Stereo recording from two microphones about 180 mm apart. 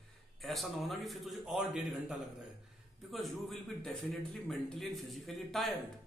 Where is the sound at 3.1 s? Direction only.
Centre (ahead or behind).